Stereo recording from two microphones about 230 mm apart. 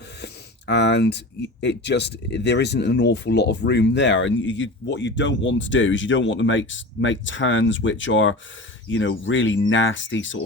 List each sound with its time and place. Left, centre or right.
0.7 s speech: left